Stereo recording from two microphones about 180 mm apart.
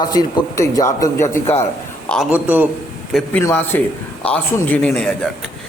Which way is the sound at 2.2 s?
10° right (ahead or behind).